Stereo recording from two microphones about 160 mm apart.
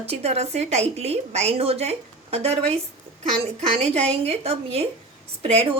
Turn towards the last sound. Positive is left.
turn(degrees=-40)  # may be behind; listen again after turning